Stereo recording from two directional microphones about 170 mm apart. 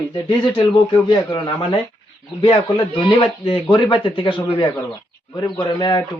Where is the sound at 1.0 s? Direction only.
25° left (ahead or behind).